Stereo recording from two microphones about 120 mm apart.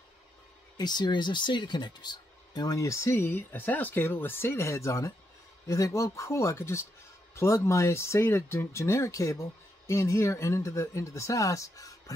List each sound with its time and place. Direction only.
0.7 s speech: 35° left (ahead or behind)